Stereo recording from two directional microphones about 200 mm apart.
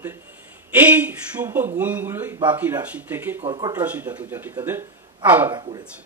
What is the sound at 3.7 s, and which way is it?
Speech, 10° right (ahead or behind).